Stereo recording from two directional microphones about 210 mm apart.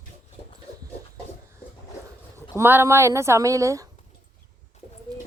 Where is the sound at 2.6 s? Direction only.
10° right (ahead or behind).